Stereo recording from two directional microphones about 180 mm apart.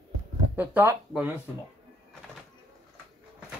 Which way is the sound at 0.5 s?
10° right (ahead or behind).